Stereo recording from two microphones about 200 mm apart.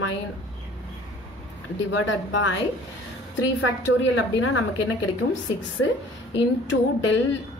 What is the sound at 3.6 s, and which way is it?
A woman's voice, 80° left.